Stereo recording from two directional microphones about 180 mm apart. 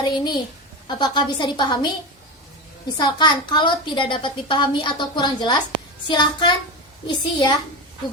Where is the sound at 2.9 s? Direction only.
25° left (ahead or behind).